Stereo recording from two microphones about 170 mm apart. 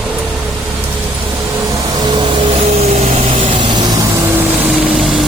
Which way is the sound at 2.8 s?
40° right (ahead or behind).